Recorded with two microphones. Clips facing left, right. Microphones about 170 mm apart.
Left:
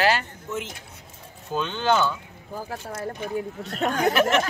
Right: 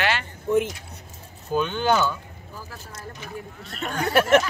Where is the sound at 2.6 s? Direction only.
55° left (ahead or behind).